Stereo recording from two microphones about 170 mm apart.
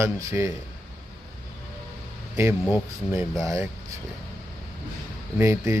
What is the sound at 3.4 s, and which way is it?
Speech, 20° right (ahead or behind).